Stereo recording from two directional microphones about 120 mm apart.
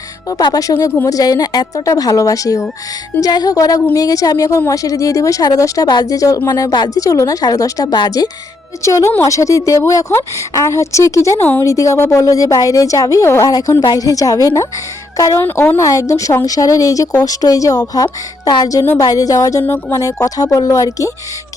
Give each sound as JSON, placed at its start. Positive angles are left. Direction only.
{"t": 0.3, "sound": "a woman's voice", "side_deg": 30}
{"t": 8.8, "sound": "a woman's voice", "side_deg": 25}
{"t": 15.4, "sound": "a woman's voice", "side_deg": 15}
{"t": 15.8, "sound": "a woman's voice", "side_deg": 30}